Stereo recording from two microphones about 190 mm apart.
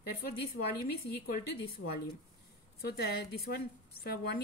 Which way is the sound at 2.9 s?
55° left (ahead or behind).